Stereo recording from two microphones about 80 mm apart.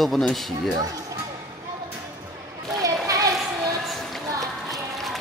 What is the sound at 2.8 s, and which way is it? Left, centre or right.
Children playing, right.